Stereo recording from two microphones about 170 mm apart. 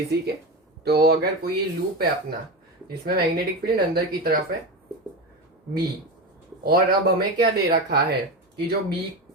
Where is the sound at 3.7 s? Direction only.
60° right (ahead or behind).